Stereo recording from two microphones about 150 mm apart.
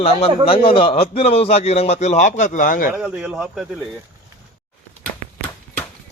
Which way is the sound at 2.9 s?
5° right (ahead or behind).